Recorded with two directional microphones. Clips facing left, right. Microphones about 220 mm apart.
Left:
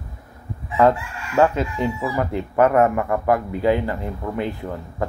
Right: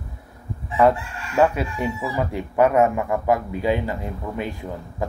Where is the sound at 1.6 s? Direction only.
15° right (ahead or behind).